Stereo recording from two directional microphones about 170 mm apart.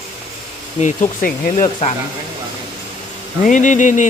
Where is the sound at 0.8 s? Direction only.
50° left (ahead or behind).